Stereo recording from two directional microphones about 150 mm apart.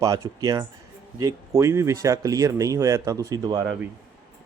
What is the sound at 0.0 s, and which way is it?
Speech, 20° right (ahead or behind).